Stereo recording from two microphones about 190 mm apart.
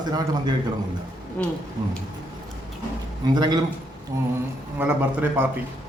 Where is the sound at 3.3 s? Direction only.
20° right (ahead or behind).